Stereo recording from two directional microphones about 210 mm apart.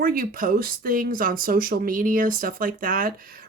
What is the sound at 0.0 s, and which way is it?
Speech, 40° right (ahead or behind).